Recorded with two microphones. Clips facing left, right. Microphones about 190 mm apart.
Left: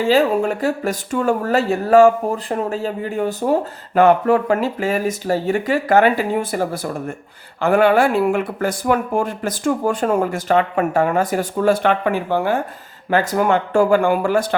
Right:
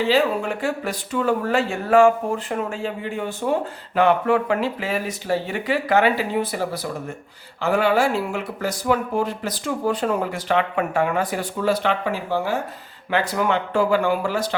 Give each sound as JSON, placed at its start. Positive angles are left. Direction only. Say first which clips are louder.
{"t": 0.0, "sound": "speech", "louder": "left 4 dB", "side_deg": 45}
{"t": 13.1, "sound": "speech", "louder": "left 5 dB", "side_deg": 45}